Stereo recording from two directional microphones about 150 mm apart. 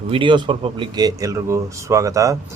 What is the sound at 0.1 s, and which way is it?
A man's voice, 35° right (ahead or behind).